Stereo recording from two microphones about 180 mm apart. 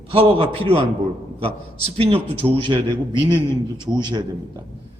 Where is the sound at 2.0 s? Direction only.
35° right (ahead or behind).